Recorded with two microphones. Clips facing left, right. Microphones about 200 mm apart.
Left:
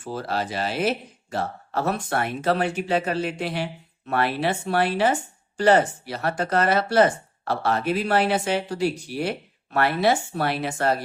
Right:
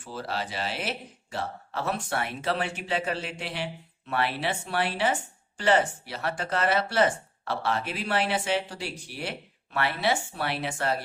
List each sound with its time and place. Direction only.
0.0 s speech: 45° left (ahead or behind)